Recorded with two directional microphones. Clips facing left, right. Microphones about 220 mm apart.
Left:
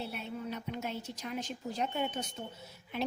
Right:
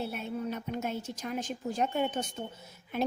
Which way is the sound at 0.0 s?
50° right (ahead or behind).